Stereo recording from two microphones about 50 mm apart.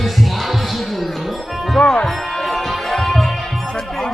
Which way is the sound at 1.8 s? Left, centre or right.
Centre.